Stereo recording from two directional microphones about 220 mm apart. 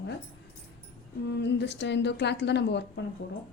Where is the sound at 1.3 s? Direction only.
50° left (ahead or behind).